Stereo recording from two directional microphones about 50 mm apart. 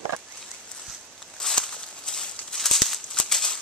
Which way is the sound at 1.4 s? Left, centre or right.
Centre.